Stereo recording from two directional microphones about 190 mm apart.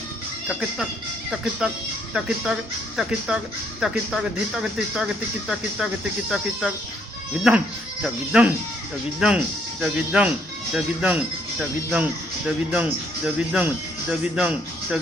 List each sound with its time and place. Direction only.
0.4 s speech: centre (ahead or behind)
8.0 s speech: 5° right (ahead or behind)